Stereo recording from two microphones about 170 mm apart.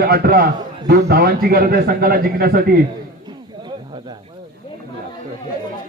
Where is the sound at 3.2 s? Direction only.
25° right (ahead or behind).